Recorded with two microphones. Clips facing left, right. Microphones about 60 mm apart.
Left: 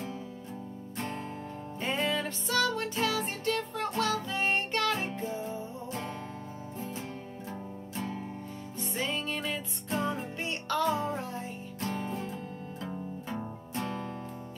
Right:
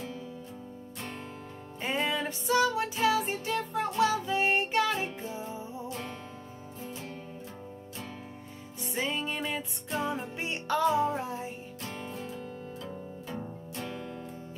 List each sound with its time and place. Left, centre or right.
1.8 s music: centre
8.9 s music: centre